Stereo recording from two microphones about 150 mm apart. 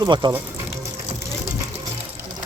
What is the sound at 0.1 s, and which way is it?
Speech, 30° right (ahead or behind).